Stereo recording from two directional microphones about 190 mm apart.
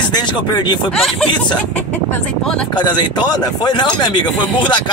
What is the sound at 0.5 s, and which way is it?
Speech, 20° left (ahead or behind).